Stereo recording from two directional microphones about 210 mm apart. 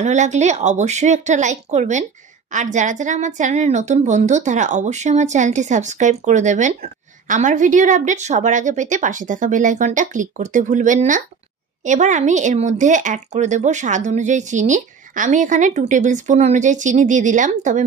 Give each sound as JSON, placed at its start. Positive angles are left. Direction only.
{"t": 0.0, "sound": "a woman's voice", "side_deg": -35}